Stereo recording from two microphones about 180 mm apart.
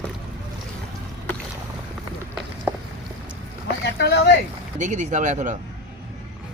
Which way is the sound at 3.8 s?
65° left (ahead or behind).